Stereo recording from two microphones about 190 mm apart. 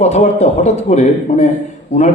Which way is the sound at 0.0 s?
35° left (ahead or behind).